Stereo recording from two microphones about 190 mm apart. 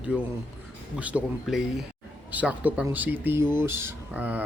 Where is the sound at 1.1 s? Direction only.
5° right (ahead or behind).